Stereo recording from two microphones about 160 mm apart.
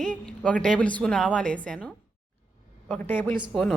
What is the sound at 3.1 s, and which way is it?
Speech, 15° left (ahead or behind).